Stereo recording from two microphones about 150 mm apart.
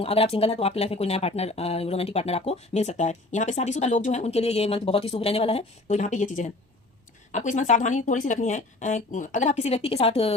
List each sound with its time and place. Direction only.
0.0 s speech: 40° left (ahead or behind)